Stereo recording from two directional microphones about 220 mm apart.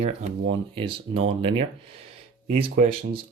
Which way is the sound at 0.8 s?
25° right (ahead or behind).